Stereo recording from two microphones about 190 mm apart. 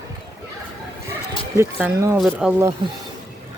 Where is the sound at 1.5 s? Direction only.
15° right (ahead or behind).